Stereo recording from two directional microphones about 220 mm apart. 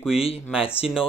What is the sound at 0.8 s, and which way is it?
Speech, 5° right (ahead or behind).